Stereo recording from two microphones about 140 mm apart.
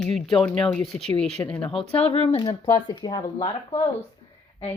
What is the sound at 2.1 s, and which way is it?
Speech, 45° left (ahead or behind).